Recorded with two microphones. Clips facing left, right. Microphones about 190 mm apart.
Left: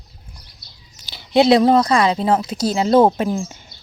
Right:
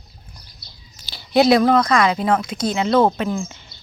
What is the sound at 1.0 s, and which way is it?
Speech, 25° left (ahead or behind).